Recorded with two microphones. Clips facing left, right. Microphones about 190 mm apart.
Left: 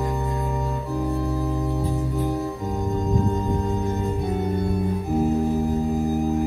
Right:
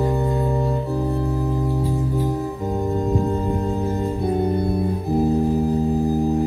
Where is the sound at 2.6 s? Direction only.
30° right (ahead or behind).